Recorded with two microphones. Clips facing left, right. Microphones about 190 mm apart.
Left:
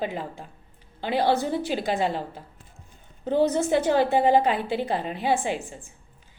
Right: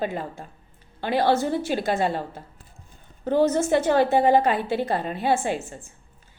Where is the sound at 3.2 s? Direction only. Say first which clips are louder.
Right 2 dB; 15° left (ahead or behind).